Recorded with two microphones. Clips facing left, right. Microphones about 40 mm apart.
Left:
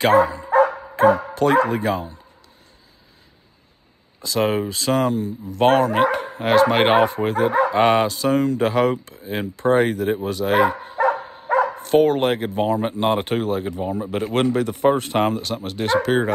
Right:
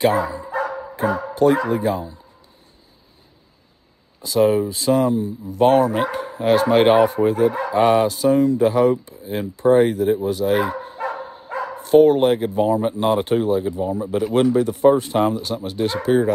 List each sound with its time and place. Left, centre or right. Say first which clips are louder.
0.0 s speech: left 3 dB; left
4.2 s speech: right 4 dB; left
10.2 s bow-wow: left 1 dB; left
11.4 s speech: left 10 dB; left